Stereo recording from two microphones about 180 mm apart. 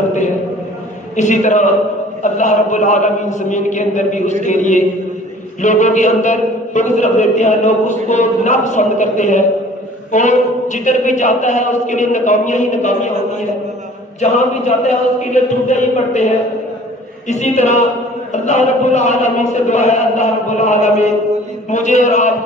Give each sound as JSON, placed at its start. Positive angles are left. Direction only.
{"t": 1.1, "sound": "a man's voice", "side_deg": 40}
{"t": 14.2, "sound": "a man's voice", "side_deg": 40}
{"t": 17.3, "sound": "a man's voice", "side_deg": 40}